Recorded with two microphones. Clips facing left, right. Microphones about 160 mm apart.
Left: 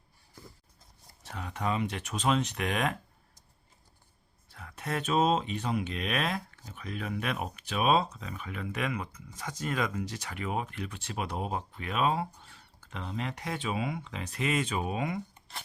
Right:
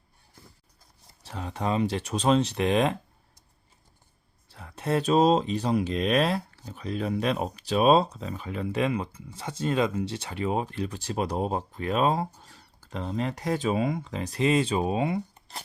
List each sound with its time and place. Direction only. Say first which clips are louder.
1.2 s speech: right 4 dB; 30° right (ahead or behind)
4.4 s speech: right 8 dB; 30° right (ahead or behind)